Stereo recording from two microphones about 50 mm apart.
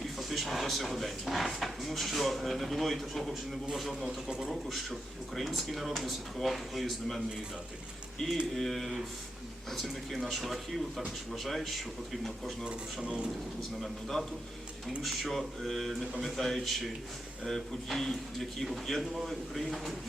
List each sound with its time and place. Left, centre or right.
0.2 s speech: centre
8.2 s speech: centre
12.6 s speech: centre
13.8 s speech: centre